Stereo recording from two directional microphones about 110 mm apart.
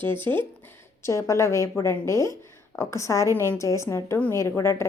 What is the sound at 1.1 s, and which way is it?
A woman's voice, 30° left (ahead or behind).